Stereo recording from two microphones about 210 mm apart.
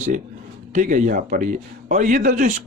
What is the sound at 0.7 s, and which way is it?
Speech, 35° right (ahead or behind).